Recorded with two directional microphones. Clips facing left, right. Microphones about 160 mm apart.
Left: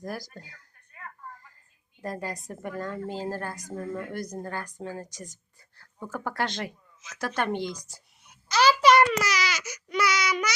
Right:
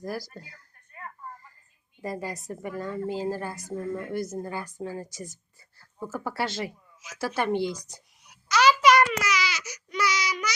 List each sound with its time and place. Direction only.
0.0 s a woman's voice: 5° right (ahead or behind)
2.0 s a woman's voice: 5° right (ahead or behind)
8.5 s babbling: 30° left (ahead or behind); by 10.5 s 65° left (ahead or behind)